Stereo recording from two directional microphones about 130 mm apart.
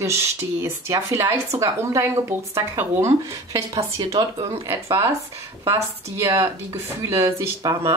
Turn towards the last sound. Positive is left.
turn(degrees=-25)  # may be behind; listen again after turning